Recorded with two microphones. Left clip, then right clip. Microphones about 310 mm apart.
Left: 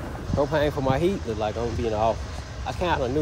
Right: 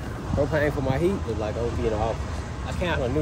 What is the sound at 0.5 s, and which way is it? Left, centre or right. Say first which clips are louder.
Speech: left 2 dB; centre.